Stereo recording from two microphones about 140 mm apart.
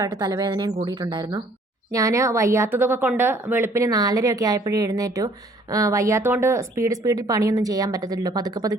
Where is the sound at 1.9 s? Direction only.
20° right (ahead or behind).